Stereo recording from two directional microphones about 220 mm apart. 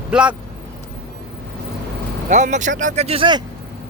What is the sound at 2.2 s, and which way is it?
Speech, 35° right (ahead or behind).